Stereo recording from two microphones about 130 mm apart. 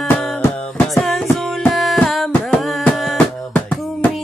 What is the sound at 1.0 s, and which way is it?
Music, 5° left (ahead or behind).